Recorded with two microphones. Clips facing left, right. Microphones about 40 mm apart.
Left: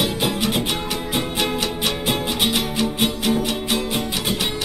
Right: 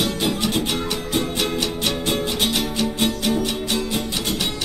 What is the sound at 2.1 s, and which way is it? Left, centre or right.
Music, centre.